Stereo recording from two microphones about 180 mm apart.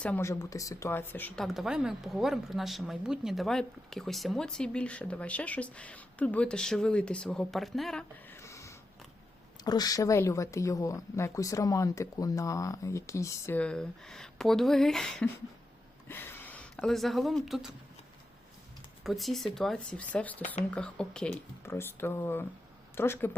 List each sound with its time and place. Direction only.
0.0 s speech: 10° left (ahead or behind)
1.5 s speech: centre (ahead or behind)
8.4 s a sound: 15° left (ahead or behind)
9.6 s speech: 20° left (ahead or behind); by 17.7 s centre (ahead or behind)
19.0 s speech: centre (ahead or behind)